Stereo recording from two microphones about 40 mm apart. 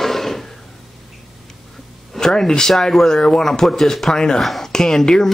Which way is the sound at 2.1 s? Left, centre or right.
Centre.